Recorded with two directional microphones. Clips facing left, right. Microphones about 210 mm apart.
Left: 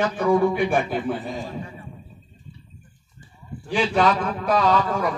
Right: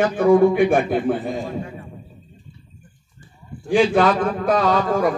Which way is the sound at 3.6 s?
50° right (ahead or behind).